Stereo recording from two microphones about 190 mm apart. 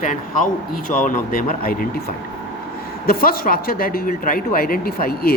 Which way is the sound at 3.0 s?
50° left (ahead or behind).